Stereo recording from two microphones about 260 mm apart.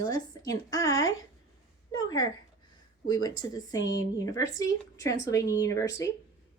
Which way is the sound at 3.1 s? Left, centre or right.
Centre.